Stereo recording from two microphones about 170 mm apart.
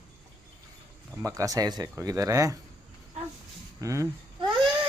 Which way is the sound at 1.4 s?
20° right (ahead or behind).